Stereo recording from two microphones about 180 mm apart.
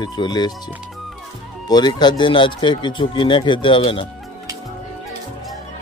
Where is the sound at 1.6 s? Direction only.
25° left (ahead or behind).